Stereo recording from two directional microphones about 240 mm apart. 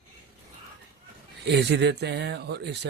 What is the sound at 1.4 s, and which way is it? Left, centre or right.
Speech, right.